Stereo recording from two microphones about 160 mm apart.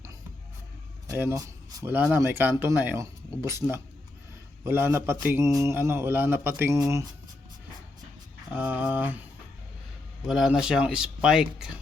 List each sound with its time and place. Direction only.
1.0 s speech: 15° right (ahead or behind)
8.5 s speech: 10° right (ahead or behind)
10.2 s speech: 5° right (ahead or behind)